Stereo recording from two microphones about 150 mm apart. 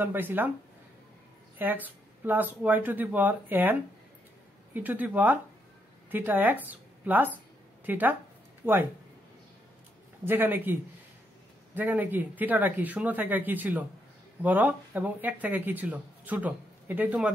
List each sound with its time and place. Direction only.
0.0 s speech: 15° right (ahead or behind)
1.6 s speech: 10° right (ahead or behind)
4.7 s a woman's voice: 10° right (ahead or behind)
10.2 s speech: 15° right (ahead or behind)